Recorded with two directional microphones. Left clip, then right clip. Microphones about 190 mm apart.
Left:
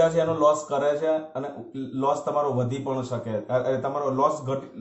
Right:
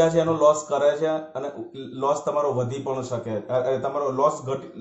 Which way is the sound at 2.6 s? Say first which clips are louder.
Right 1 dB; 25° right (ahead or behind).